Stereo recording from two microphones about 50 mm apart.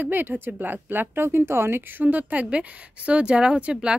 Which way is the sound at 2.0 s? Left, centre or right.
Right.